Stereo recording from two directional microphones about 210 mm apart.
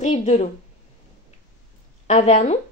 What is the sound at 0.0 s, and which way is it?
Speech, 35° left (ahead or behind).